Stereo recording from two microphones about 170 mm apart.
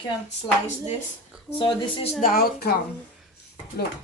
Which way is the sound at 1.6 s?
30° left (ahead or behind).